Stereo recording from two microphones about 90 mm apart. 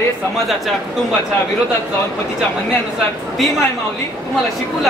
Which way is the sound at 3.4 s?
Centre (ahead or behind).